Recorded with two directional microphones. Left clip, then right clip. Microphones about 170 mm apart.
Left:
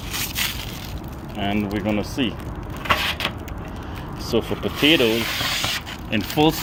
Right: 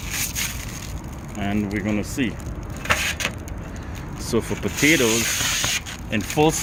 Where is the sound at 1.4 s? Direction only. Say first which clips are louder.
Left 2 dB; 15° right (ahead or behind).